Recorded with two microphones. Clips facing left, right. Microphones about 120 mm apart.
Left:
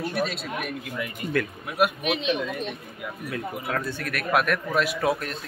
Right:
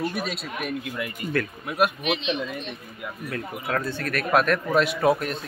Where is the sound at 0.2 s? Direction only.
5° right (ahead or behind).